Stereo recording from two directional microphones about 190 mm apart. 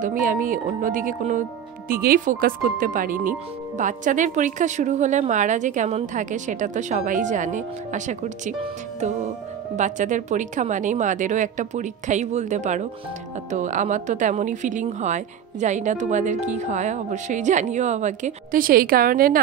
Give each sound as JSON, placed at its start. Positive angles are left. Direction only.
{"t": 0.0, "sound": "speech", "side_deg": -45}
{"t": 9.8, "sound": "speech", "side_deg": -40}